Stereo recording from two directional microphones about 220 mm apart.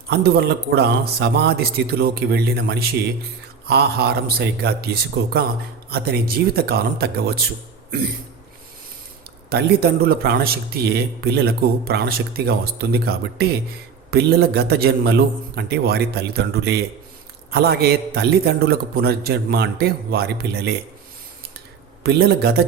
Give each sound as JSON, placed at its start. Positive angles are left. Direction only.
{"t": 0.1, "sound": "speech", "side_deg": -45}
{"t": 9.5, "sound": "speech", "side_deg": -45}
{"t": 22.0, "sound": "speech", "side_deg": -45}